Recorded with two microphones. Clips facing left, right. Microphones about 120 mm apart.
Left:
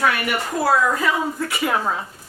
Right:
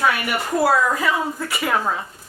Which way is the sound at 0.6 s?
Centre (ahead or behind).